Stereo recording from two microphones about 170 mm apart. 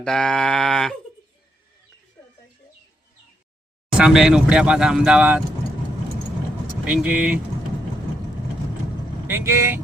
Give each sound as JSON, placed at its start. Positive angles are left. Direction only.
{"t": 0.0, "sound": "speech", "side_deg": 5}
{"t": 3.9, "sound": "speech", "side_deg": -5}
{"t": 6.9, "sound": "speech", "side_deg": -10}
{"t": 9.2, "sound": "speech", "side_deg": -15}